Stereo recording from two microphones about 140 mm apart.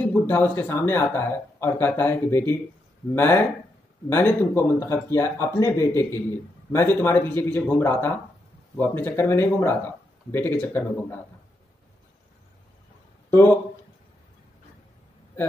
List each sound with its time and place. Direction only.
0.1 s speech: 15° left (ahead or behind)
13.3 s a man's voice: 15° left (ahead or behind)